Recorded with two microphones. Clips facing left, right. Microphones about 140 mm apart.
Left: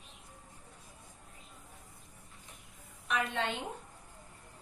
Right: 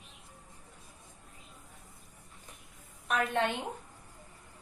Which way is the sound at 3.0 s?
55° right (ahead or behind).